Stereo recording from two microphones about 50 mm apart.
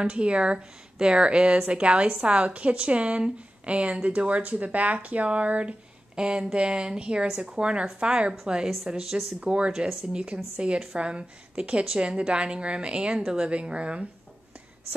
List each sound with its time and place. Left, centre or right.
0.0 s a woman's voice: right